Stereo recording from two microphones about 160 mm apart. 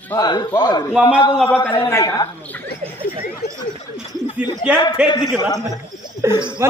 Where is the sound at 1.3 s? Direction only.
5° left (ahead or behind).